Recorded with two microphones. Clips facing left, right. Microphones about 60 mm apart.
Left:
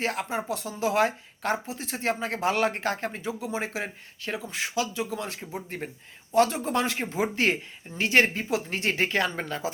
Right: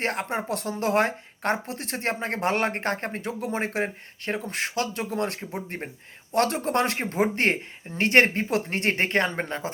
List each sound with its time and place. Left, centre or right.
0.0 s speech: right